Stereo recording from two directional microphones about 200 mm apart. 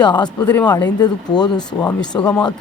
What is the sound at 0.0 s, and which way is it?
Speech, 20° left (ahead or behind).